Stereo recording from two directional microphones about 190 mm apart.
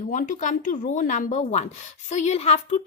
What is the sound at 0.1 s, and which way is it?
Speech, 40° left (ahead or behind).